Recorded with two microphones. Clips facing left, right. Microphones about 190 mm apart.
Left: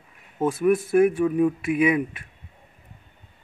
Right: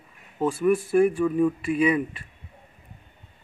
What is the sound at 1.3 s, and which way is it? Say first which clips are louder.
Speech: left 1 dB; 15° left (ahead or behind).